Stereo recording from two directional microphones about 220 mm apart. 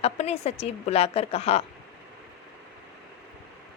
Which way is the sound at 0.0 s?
30° left (ahead or behind).